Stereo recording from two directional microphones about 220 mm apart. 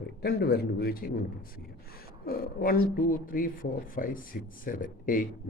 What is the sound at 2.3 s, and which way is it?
Speech, 40° left (ahead or behind).